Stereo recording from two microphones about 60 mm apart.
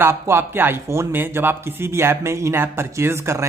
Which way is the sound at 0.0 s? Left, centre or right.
Right.